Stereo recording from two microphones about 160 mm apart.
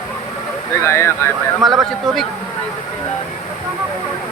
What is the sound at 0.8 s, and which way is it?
Speech, 15° left (ahead or behind).